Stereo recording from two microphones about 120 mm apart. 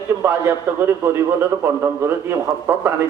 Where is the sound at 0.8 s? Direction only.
20° right (ahead or behind).